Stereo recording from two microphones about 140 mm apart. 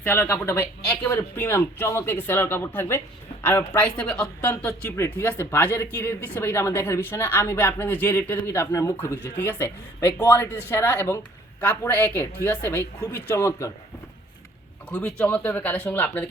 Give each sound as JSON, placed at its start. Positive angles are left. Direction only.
{"t": 0.0, "sound": "speech", "side_deg": 15}
{"t": 14.8, "sound": "speech", "side_deg": 5}